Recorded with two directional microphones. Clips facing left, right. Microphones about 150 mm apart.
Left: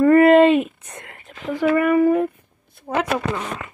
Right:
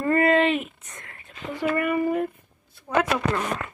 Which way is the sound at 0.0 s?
65° left (ahead or behind).